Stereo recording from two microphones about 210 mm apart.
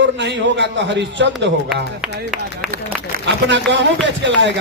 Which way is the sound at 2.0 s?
Centre (ahead or behind).